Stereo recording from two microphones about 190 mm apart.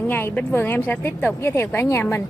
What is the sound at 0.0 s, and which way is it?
A woman's voice, 10° left (ahead or behind).